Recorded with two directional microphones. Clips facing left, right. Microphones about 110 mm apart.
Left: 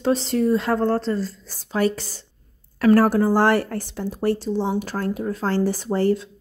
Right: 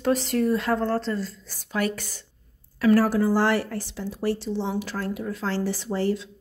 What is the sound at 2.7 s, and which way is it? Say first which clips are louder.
Speech: left 4 dB; 55° left (ahead or behind).